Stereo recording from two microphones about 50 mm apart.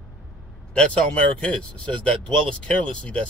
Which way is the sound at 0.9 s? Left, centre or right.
Left.